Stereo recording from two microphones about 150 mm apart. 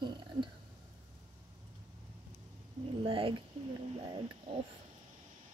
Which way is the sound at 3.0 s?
35° right (ahead or behind).